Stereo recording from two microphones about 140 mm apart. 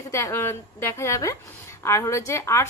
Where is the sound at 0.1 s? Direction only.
20° left (ahead or behind).